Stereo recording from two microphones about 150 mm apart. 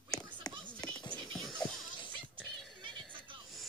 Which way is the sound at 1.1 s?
Centre (ahead or behind).